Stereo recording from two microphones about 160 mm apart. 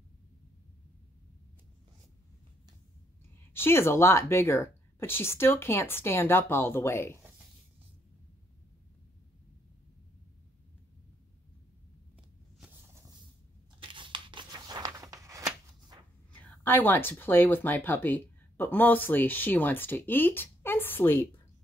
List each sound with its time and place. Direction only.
3.5 s speech: 15° left (ahead or behind)
13.7 s a sound: 30° right (ahead or behind)
16.3 s speech: 10° left (ahead or behind)